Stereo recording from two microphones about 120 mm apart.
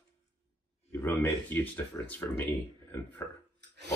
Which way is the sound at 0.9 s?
20° left (ahead or behind).